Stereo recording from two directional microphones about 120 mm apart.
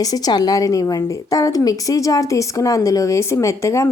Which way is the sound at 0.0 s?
30° left (ahead or behind).